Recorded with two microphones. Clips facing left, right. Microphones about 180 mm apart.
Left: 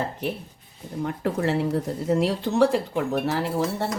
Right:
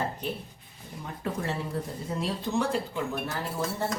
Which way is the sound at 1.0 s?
75° left (ahead or behind).